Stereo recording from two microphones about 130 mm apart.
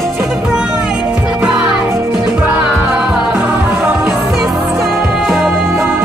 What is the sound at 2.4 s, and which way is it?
Music, 20° right (ahead or behind).